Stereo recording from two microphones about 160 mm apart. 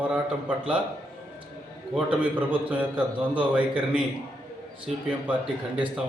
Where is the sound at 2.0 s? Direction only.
10° right (ahead or behind).